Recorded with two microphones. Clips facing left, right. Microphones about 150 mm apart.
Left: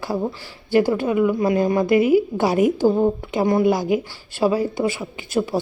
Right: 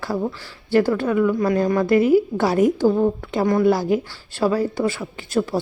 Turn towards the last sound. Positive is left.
turn(degrees=10)  # may be behind; listen again after turning